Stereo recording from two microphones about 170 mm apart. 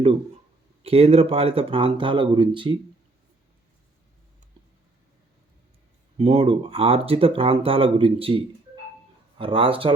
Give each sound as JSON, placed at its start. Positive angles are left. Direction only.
{"t": 0.9, "sound": "speech", "side_deg": -35}
{"t": 6.1, "sound": "speech", "side_deg": -35}
{"t": 9.4, "sound": "speech", "side_deg": -30}